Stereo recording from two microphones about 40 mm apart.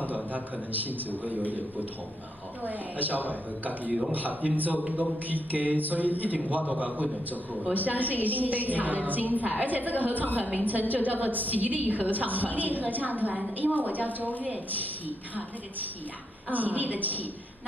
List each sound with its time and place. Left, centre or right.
0.1 s a man's voice: right
2.6 s a woman's voice: right
14.4 s a woman's voice: right